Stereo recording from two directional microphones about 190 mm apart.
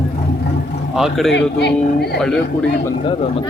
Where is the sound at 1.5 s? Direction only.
60° left (ahead or behind).